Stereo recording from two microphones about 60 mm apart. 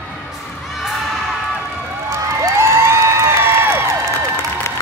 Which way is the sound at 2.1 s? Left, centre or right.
Right.